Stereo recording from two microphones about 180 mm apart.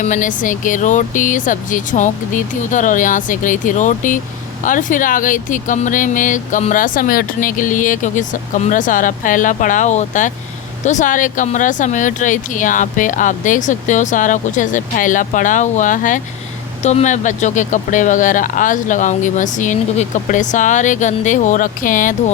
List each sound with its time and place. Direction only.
0.0 s speech: 45° left (ahead or behind)